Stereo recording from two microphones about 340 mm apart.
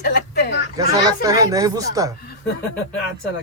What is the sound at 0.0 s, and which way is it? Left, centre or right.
Speech, left.